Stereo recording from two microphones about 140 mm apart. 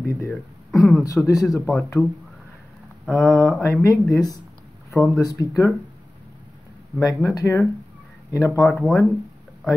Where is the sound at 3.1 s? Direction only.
5° left (ahead or behind).